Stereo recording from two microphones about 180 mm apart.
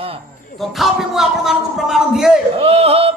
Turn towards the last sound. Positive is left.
turn(degrees=-35)  # may be behind; listen again after turning